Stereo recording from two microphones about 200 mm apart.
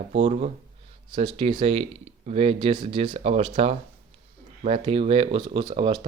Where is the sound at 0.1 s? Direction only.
35° right (ahead or behind).